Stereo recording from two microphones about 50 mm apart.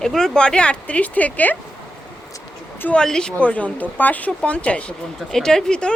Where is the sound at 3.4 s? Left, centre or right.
Left.